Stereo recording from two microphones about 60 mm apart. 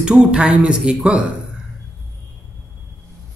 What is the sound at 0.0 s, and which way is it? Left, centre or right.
Speech, centre.